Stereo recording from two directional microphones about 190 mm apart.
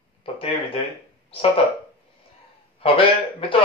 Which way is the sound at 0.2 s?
30° left (ahead or behind).